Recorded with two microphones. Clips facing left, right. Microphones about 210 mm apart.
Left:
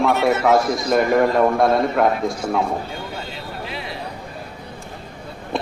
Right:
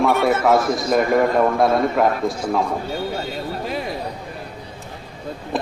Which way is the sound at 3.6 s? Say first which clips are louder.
Right 5 dB; 45° right (ahead or behind).